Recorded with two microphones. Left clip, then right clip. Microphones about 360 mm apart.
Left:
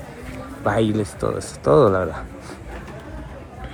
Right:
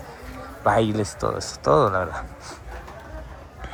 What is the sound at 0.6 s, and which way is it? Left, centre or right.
Speech, centre.